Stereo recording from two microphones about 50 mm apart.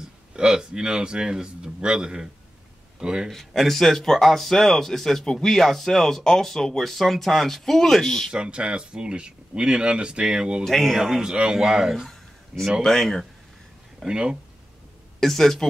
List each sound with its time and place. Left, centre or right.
0.3 s a man's voice: centre
3.3 s speech: centre
8.3 s speech: centre
10.6 s speech: centre
11.0 s a man's voice: centre
12.8 s speech: centre
14.0 s a man's voice: centre
15.1 s speech: centre